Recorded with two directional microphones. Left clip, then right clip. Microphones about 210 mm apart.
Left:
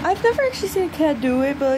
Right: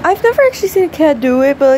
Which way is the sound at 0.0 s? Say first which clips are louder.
Right 8 dB; 10° right (ahead or behind).